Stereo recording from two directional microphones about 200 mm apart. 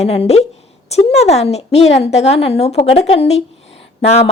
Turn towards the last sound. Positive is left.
turn(degrees=30)  # may be behind; listen again after turning